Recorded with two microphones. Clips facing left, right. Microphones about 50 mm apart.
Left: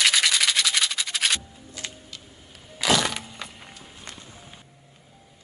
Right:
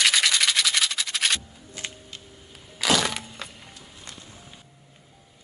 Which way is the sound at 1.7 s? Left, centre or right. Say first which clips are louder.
Right 1 dB; right.